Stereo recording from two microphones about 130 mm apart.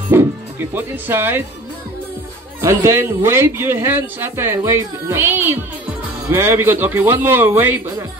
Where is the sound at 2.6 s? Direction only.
20° right (ahead or behind).